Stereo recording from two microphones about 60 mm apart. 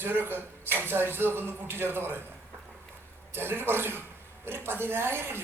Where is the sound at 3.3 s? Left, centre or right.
Right.